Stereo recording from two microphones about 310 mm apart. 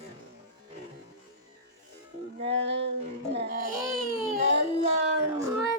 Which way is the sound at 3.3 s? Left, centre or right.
Right.